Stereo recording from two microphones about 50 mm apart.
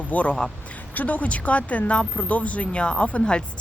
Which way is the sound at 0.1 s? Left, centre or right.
Left.